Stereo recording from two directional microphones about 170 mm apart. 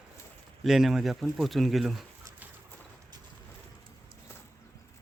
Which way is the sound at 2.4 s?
10° right (ahead or behind).